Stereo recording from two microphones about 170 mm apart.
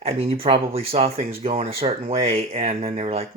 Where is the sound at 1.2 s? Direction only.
60° right (ahead or behind).